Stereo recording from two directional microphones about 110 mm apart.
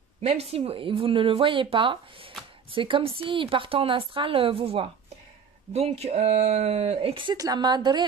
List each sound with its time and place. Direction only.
0.2 s speech: 70° right (ahead or behind)
5.7 s speech: 75° right (ahead or behind); by 7.3 s 55° right (ahead or behind)
7.3 s a woman's voice: 35° right (ahead or behind)